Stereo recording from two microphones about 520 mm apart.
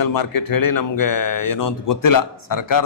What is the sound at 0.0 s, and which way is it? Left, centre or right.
Speech, left.